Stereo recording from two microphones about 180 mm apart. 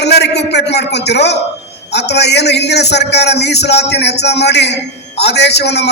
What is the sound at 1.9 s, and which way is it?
A man's voice, 70° left (ahead or behind).